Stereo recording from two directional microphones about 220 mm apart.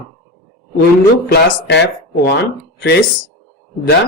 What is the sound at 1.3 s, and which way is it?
Speech, 50° left (ahead or behind).